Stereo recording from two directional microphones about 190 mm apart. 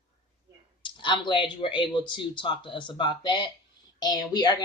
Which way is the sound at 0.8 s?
25° left (ahead or behind).